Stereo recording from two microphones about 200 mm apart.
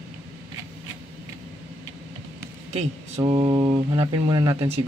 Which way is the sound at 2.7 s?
35° right (ahead or behind).